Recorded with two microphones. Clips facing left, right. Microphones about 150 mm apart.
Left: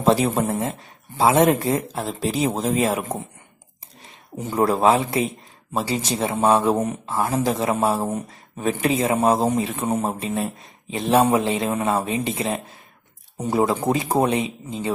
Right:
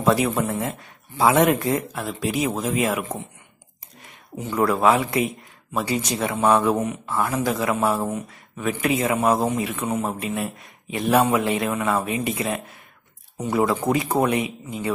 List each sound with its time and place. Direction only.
0.0 s speech: 30° left (ahead or behind)
4.4 s speech: 35° left (ahead or behind)
8.1 s speech: 40° left (ahead or behind)
9.8 s speech: 40° left (ahead or behind); by 14.9 s 25° left (ahead or behind)